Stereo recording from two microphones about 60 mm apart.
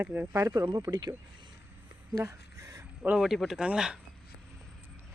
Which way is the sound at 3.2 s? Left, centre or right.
Centre.